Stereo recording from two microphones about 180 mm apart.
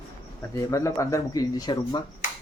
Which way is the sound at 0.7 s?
15° left (ahead or behind).